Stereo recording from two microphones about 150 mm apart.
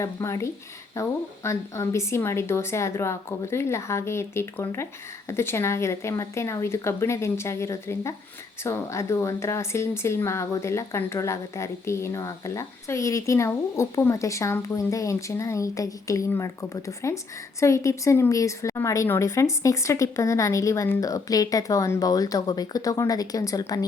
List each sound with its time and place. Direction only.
0.0 s a woman's voice: 20° left (ahead or behind)